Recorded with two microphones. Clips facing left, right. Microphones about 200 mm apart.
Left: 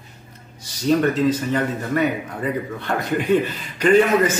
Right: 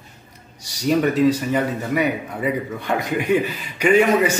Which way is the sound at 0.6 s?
10° right (ahead or behind).